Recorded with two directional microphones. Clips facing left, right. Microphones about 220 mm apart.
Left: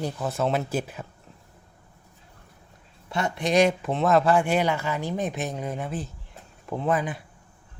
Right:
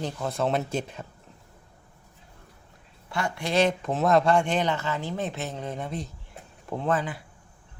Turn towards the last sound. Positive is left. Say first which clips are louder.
# left 1 dB
turn(degrees=15)  # may be behind; listen again after turning